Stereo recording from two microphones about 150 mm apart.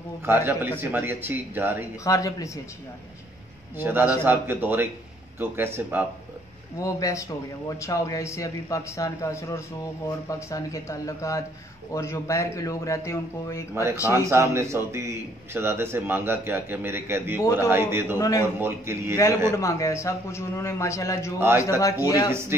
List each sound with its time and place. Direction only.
0.2 s a man's voice: 15° right (ahead or behind)
2.0 s speech: 20° left (ahead or behind)
3.7 s a man's voice: 15° right (ahead or behind)
6.8 s speech: 20° left (ahead or behind)
14.1 s a man's voice: 20° right (ahead or behind)
18.1 s speech: 20° left (ahead or behind)
18.4 s a man's voice: 15° right (ahead or behind)
19.5 s speech: 20° left (ahead or behind)